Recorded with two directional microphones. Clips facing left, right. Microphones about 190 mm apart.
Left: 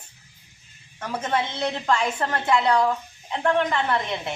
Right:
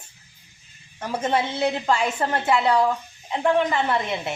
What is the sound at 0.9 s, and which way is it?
A woman's voice, 10° right (ahead or behind).